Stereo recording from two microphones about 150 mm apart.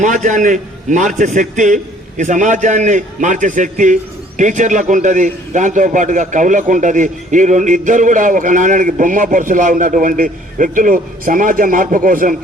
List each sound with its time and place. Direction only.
0.0 s a man's voice: 55° right (ahead or behind)